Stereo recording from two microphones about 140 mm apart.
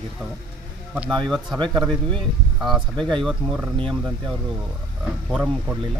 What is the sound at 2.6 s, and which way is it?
Speech, centre (ahead or behind).